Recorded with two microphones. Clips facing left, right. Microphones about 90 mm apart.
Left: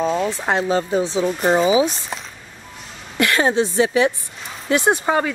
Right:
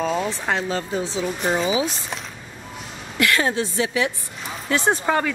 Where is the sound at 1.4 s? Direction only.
40° left (ahead or behind).